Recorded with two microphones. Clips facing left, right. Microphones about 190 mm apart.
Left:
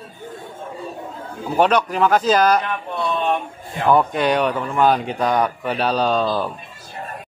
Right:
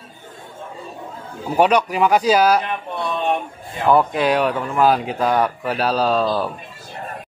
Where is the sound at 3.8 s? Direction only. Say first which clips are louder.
Right 1 dB; centre (ahead or behind).